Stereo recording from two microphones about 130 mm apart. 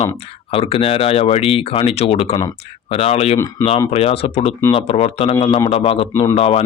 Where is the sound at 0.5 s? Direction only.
45° left (ahead or behind).